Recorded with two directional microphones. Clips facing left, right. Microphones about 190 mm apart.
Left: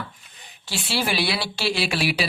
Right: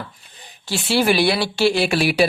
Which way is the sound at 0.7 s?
55° right (ahead or behind).